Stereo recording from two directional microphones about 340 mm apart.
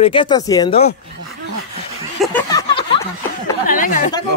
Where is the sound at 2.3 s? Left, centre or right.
Centre.